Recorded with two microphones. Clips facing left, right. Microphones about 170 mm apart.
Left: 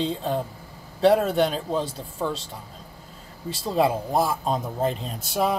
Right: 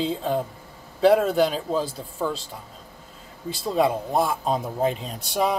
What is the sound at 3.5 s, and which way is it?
A man's voice, centre (ahead or behind).